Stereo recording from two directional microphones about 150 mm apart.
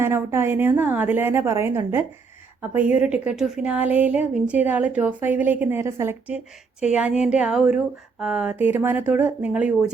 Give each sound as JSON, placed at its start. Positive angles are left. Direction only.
{"t": 0.0, "sound": "a woman's voice", "side_deg": -15}